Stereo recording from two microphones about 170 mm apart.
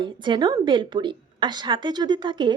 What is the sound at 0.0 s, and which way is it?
A woman's voice, 25° right (ahead or behind).